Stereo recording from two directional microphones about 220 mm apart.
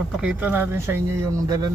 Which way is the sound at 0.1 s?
5° right (ahead or behind).